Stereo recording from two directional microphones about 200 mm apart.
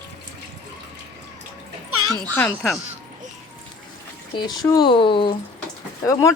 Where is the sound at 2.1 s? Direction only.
10° left (ahead or behind).